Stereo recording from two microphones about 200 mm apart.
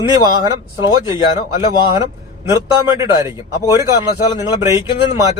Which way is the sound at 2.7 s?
15° right (ahead or behind).